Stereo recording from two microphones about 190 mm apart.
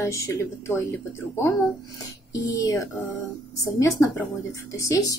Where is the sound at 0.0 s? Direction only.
15° left (ahead or behind).